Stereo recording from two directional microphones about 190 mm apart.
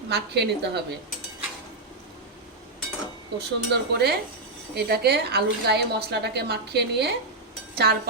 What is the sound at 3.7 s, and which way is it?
A woman's voice, 60° right (ahead or behind).